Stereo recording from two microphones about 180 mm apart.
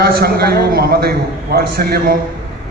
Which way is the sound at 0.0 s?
60° right (ahead or behind).